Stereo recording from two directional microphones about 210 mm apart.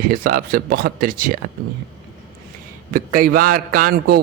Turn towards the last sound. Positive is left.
turn(degrees=-45)  # may be behind; listen again after turning